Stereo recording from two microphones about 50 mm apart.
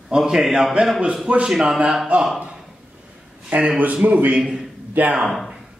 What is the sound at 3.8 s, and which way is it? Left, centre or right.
A man's voice, right.